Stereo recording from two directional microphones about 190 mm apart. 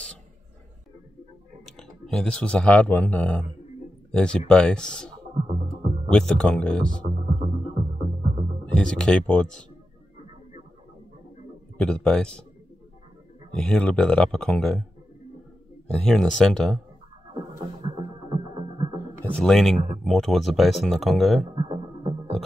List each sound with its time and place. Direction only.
1.7 s speech: centre (ahead or behind)
5.5 s music: 30° right (ahead or behind)
6.0 s speech: 5° left (ahead or behind)
7.1 s music: 30° right (ahead or behind)
8.7 s speech: 5° left (ahead or behind)
11.8 s speech: 5° left (ahead or behind)
13.6 s speech: 5° left (ahead or behind)
15.9 s speech: centre (ahead or behind)
17.3 s music: 25° right (ahead or behind)
19.3 s speech: 5° left (ahead or behind)
21.4 s music: 25° right (ahead or behind)